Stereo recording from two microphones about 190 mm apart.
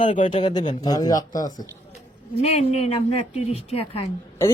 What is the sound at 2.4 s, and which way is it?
A woman's voice, 35° left (ahead or behind).